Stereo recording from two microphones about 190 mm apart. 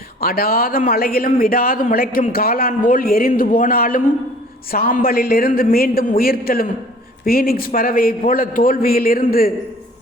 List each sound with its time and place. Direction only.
0.2 s a man's voice: 50° left (ahead or behind)